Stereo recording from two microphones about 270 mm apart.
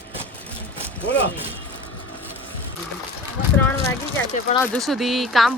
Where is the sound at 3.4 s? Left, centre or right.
Left.